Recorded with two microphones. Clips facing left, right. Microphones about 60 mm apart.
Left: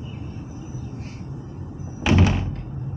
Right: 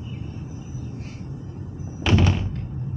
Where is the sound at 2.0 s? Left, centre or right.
Centre.